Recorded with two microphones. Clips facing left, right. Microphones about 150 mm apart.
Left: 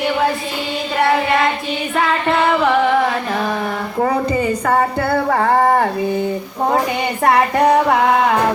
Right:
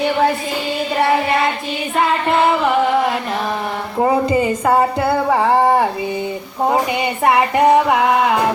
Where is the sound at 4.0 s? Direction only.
15° right (ahead or behind).